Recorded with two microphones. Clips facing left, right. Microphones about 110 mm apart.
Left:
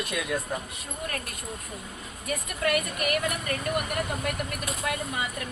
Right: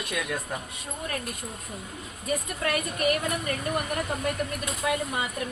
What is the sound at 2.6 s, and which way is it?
Speech, 30° right (ahead or behind).